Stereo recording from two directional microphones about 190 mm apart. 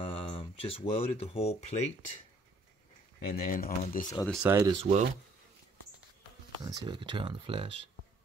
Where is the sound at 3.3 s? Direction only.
50° left (ahead or behind).